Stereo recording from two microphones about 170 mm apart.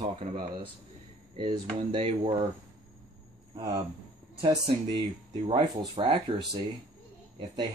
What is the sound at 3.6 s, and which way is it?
Speech, 25° right (ahead or behind).